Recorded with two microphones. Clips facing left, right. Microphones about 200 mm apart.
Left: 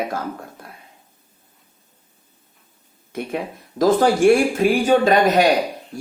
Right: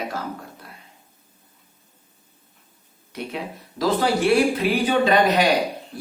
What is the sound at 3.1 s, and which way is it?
Speech, 50° left (ahead or behind).